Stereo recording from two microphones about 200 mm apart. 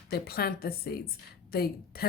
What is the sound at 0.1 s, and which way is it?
Speech, 50° left (ahead or behind).